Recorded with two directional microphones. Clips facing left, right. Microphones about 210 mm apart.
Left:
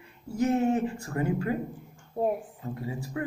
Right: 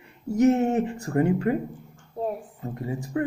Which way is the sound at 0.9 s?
35° right (ahead or behind).